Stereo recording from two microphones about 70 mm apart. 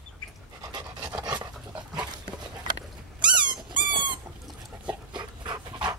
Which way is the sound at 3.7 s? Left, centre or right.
Right.